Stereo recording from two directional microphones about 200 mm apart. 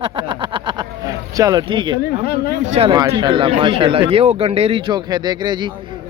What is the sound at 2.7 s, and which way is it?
Speech, 25° right (ahead or behind).